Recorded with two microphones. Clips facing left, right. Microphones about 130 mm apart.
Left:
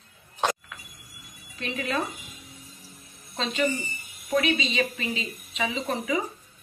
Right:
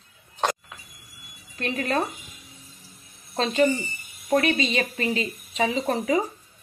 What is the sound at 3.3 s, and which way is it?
Speech, 40° right (ahead or behind).